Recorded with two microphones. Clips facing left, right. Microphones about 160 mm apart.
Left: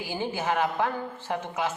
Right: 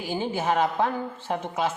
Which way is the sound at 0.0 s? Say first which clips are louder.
Right 3 dB; 20° right (ahead or behind).